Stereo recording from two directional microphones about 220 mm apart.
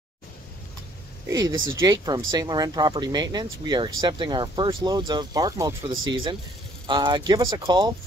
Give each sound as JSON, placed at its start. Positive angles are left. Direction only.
{"t": 1.3, "sound": "speech", "side_deg": -15}